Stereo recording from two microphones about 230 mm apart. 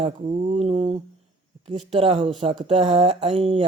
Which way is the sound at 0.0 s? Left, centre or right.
Right.